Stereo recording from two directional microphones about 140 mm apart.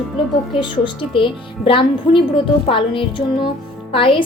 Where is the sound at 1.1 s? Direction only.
40° left (ahead or behind).